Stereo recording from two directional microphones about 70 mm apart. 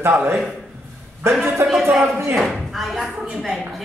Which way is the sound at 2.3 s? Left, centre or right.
Centre.